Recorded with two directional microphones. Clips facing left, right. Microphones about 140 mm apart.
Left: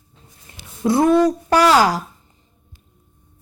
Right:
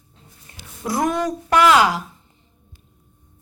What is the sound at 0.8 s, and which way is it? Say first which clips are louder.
A woman's voice: left 7 dB; 30° left (ahead or behind).